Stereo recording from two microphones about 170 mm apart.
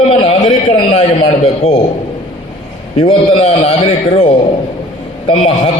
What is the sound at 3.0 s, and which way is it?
A man's voice, 30° left (ahead or behind).